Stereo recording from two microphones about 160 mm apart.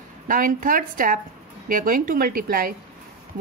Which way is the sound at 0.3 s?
55° right (ahead or behind).